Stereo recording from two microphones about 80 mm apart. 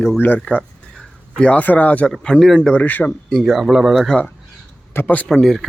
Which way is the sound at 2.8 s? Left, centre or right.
Left.